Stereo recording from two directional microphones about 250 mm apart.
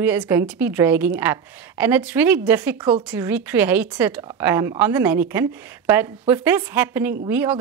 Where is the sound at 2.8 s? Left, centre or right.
Centre.